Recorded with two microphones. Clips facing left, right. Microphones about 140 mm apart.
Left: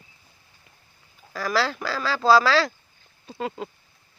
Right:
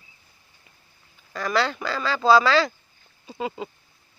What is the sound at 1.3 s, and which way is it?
Speech, centre (ahead or behind).